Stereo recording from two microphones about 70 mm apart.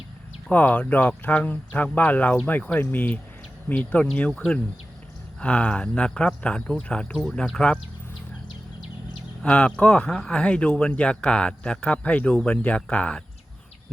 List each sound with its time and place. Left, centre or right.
0.5 s speech: left
9.4 s speech: centre